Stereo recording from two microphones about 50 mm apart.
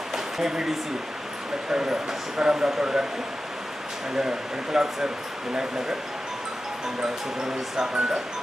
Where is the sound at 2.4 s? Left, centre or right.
Centre.